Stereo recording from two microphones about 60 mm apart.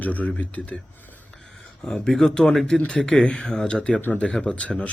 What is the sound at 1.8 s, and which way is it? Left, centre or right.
Speech, centre.